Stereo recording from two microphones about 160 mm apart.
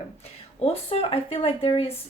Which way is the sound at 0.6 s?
35° left (ahead or behind).